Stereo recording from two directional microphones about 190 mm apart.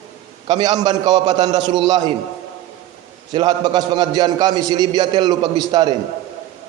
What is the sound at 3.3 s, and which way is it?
A man's voice, 20° right (ahead or behind).